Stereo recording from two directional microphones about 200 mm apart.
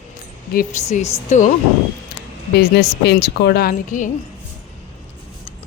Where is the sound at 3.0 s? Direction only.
55° left (ahead or behind).